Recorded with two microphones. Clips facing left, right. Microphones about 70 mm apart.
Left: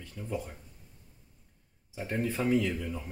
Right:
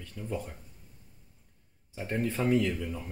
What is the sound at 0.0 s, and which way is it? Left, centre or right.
Speech, centre.